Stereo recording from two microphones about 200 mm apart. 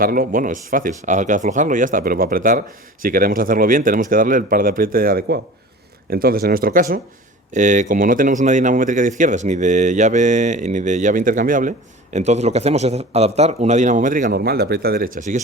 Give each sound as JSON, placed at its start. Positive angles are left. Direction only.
{"t": 0.0, "sound": "speech", "side_deg": -45}